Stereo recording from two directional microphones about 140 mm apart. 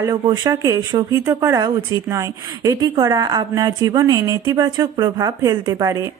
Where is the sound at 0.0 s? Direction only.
30° right (ahead or behind).